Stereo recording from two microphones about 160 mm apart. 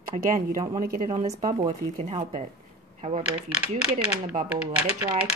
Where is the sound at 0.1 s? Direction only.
60° right (ahead or behind).